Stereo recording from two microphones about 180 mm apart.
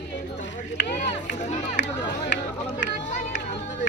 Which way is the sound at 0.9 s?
40° left (ahead or behind).